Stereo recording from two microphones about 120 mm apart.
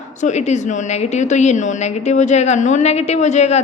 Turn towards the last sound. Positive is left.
turn(degrees=70)  # may be behind; listen again after turning